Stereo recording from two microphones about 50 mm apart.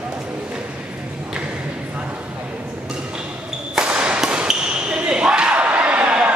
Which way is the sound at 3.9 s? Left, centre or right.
Right.